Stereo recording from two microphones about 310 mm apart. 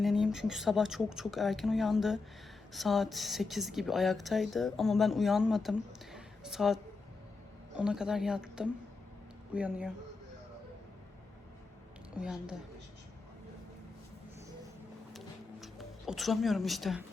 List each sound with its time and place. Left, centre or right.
0.0 s speech: centre
7.8 s speech: centre
12.2 s speech: centre
15.6 s speech: centre